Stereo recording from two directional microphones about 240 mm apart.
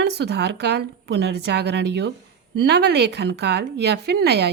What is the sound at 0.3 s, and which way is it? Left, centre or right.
A woman's voice, right.